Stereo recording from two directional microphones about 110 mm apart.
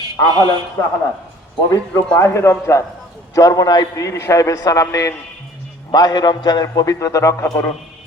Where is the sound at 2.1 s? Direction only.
25° left (ahead or behind).